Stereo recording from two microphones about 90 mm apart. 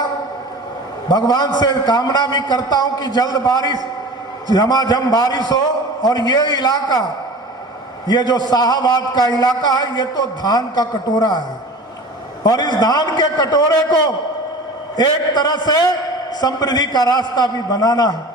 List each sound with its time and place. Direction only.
1.0 s a man's voice: 50° left (ahead or behind)
8.0 s a man's voice: 50° left (ahead or behind)